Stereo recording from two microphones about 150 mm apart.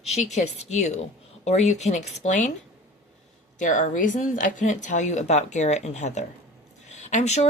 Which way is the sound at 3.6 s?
60° left (ahead or behind).